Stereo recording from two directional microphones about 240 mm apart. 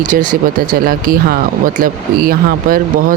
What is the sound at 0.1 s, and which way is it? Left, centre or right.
Speech, right.